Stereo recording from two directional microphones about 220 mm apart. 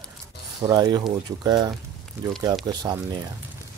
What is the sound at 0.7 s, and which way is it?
Speech, 20° right (ahead or behind).